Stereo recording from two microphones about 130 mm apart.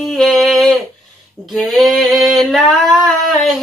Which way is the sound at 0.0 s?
Centre (ahead or behind).